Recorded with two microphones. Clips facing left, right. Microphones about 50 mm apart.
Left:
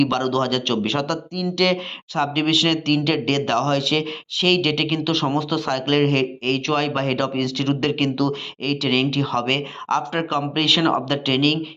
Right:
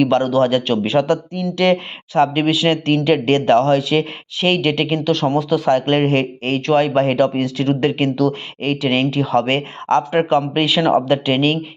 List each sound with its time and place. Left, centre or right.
0.0 s speech: centre
5.0 s speech: centre; by 11.6 s right